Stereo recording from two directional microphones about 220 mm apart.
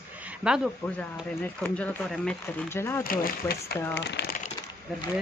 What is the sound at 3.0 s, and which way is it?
Speech, 40° left (ahead or behind).